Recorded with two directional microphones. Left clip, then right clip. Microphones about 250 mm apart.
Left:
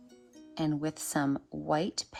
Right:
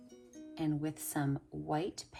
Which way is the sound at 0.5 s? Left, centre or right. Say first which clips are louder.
Left 4 dB; left.